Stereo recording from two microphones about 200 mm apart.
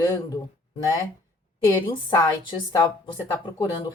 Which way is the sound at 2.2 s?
20° left (ahead or behind).